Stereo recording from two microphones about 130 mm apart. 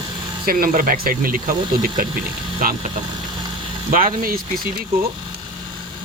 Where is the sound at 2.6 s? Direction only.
90° right.